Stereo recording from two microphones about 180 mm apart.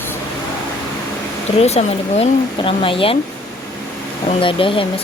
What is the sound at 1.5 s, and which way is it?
Speech, 35° left (ahead or behind).